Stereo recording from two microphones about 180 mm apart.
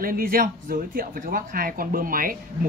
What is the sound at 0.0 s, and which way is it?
Speech, 55° right (ahead or behind).